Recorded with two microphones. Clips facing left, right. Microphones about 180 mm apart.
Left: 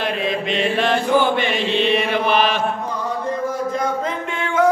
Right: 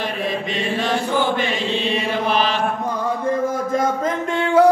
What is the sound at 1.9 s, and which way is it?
Mantra, 65° left (ahead or behind).